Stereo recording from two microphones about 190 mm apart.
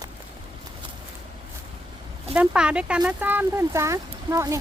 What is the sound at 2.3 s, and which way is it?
Speech, 5° right (ahead or behind).